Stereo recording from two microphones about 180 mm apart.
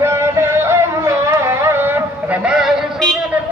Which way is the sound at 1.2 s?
15° right (ahead or behind).